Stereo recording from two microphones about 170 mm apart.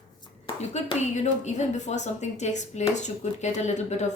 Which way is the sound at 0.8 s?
40° left (ahead or behind).